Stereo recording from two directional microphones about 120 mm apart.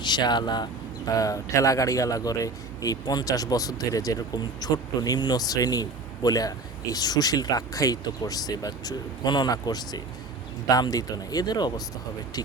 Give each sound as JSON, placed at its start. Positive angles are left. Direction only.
{"t": 0.0, "sound": "speech", "side_deg": 40}